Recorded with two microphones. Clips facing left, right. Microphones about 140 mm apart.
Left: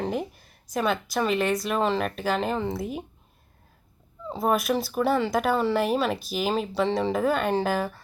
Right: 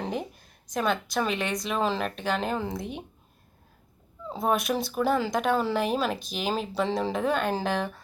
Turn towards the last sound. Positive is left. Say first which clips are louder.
# left 3 dB
turn(degrees=5)  # may be behind; listen again after turning